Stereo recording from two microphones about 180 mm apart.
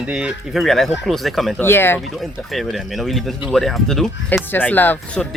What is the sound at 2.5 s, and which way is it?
Speech, centre (ahead or behind).